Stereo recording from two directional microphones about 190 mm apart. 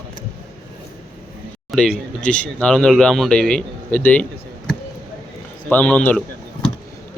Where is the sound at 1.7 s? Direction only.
5° left (ahead or behind).